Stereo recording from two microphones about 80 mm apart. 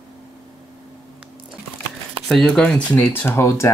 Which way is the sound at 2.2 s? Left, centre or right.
Centre.